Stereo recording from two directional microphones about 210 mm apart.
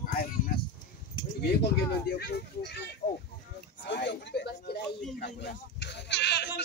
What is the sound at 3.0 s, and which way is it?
Speech, 35° left (ahead or behind).